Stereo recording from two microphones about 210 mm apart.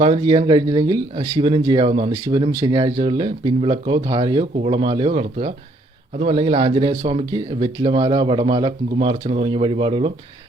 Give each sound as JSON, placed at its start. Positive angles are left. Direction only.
{"t": 0.0, "sound": "speech", "side_deg": -25}